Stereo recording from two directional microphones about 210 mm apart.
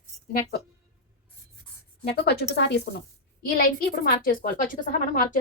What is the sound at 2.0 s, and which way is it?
A woman's voice, 50° left (ahead or behind).